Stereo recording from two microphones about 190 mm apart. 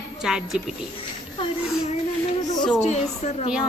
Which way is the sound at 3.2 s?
35° left (ahead or behind).